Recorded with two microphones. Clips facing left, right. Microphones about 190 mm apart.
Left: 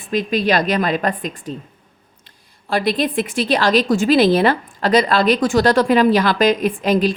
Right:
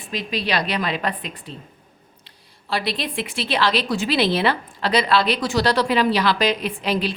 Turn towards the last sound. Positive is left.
turn(degrees=45)  # may be behind; listen again after turning